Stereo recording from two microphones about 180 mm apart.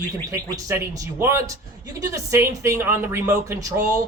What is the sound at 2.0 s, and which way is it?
Speech, 15° right (ahead or behind).